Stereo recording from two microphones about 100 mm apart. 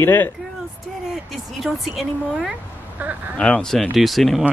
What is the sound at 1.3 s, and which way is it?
Speech, centre (ahead or behind).